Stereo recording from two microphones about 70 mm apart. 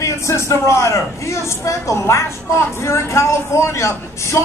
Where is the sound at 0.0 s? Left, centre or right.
Left.